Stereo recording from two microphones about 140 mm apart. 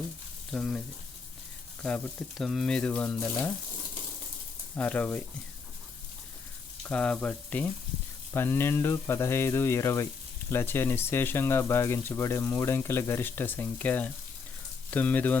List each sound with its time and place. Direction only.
0.5 s speech: 5° left (ahead or behind)
1.8 s speech: 5° left (ahead or behind)
4.8 s speech: 10° left (ahead or behind)
6.8 s speech: 10° left (ahead or behind)